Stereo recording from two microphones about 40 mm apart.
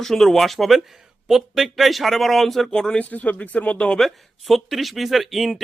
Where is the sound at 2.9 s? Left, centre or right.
Left.